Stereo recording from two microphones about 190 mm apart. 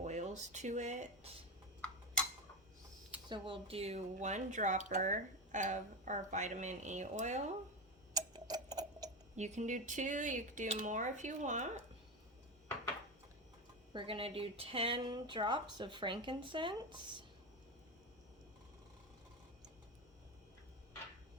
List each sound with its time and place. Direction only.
0.0 s speech: 40° right (ahead or behind)
3.2 s speech: 25° right (ahead or behind)
8.1 s clock: 20° right (ahead or behind)
9.3 s speech: 35° right (ahead or behind)
13.9 s speech: 30° right (ahead or behind)